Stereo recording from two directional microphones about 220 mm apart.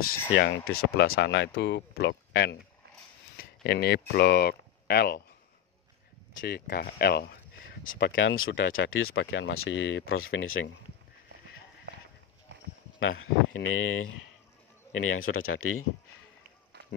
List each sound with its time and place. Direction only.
0.3 s speech: 50° left (ahead or behind)
6.4 s speech: 45° left (ahead or behind); by 10.7 s 65° left (ahead or behind)
13.5 s speech: 65° left (ahead or behind)